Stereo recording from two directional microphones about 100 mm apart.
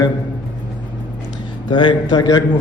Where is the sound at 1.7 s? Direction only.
50° left (ahead or behind).